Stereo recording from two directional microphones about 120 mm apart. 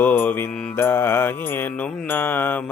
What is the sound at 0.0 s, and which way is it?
Mantra, 15° left (ahead or behind).